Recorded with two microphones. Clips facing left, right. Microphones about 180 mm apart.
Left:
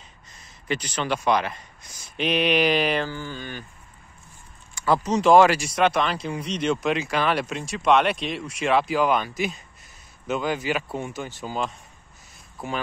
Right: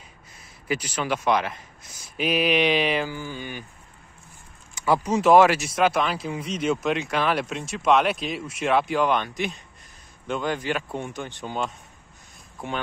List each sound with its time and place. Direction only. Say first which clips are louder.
0.4 s speech: even; 5° right (ahead or behind)
3.1 s mantra: even; 10° right (ahead or behind)
4.7 s speech: even; 15° right (ahead or behind)